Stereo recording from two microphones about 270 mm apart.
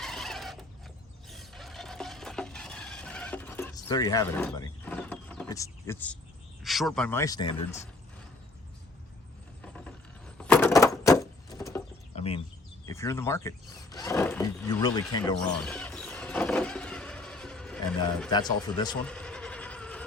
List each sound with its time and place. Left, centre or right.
0.0 s a sound: centre
1.3 s stir: centre
6.6 s speech: centre
9.6 s vehicle: centre
10.3 s a sound: centre
12.1 s bird: left
12.8 s speech: centre
15.6 s vehicle: centre
18.3 s speech: centre
19.0 s a sound: centre